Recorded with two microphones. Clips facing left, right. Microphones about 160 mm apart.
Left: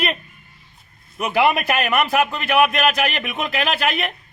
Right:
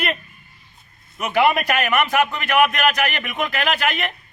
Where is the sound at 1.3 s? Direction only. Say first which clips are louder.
Even; centre (ahead or behind).